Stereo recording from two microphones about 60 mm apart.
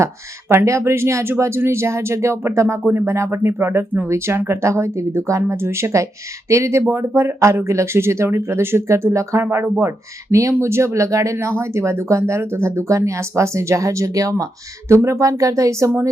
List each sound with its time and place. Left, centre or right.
0.0 s speech: right
14.8 s speech: right